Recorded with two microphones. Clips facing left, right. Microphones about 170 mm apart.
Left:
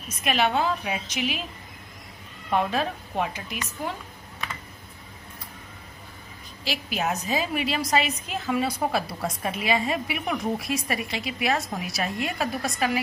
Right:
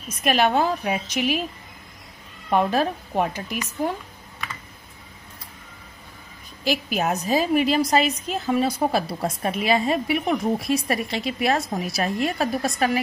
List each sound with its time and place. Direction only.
0.2 s a woman's voice: 45° right (ahead or behind)
2.5 s a woman's voice: 45° right (ahead or behind)
6.6 s a woman's voice: 50° right (ahead or behind)